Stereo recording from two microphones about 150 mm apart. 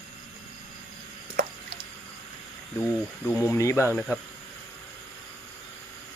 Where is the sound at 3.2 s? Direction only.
20° left (ahead or behind).